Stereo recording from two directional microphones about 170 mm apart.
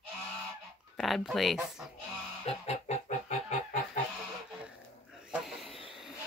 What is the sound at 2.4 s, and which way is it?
Fowl, 40° left (ahead or behind).